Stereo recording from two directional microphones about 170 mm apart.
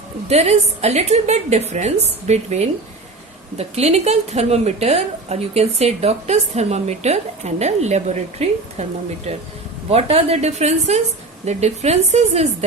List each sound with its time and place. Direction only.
0.3 s a woman's voice: 40° right (ahead or behind)